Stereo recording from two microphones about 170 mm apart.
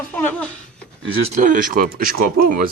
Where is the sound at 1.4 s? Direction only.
50° right (ahead or behind).